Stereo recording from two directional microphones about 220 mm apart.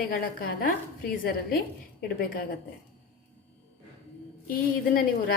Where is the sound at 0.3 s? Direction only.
40° left (ahead or behind).